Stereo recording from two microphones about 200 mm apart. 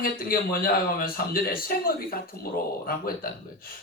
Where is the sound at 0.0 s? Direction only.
50° left (ahead or behind).